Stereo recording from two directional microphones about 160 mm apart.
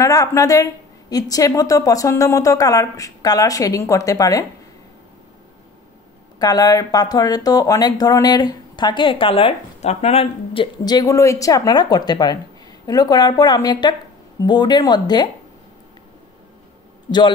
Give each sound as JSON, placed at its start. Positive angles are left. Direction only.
{"t": 0.0, "sound": "speech", "side_deg": 20}
{"t": 6.4, "sound": "speech", "side_deg": 25}